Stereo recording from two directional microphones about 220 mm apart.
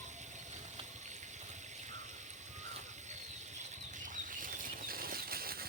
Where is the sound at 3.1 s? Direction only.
30° right (ahead or behind).